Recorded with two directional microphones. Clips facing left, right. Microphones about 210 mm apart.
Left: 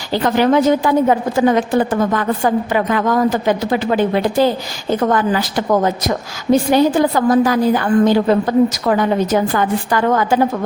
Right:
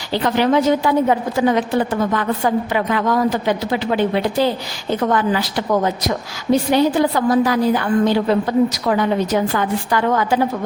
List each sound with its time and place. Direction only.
0.1 s a woman's voice: 45° left (ahead or behind)